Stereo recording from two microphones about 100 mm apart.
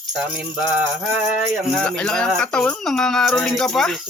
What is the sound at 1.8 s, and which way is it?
Speech, 10° left (ahead or behind).